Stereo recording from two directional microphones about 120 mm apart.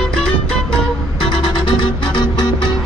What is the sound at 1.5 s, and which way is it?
Music, 40° left (ahead or behind).